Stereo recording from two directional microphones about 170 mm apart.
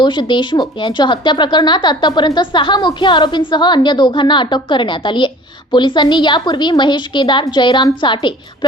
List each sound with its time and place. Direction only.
0.0 s a woman's voice: 25° left (ahead or behind)